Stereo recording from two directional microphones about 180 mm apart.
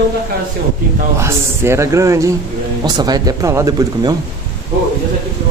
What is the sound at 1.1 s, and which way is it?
A man's voice, 15° right (ahead or behind).